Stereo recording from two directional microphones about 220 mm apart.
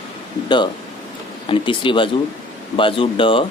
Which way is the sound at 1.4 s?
25° left (ahead or behind).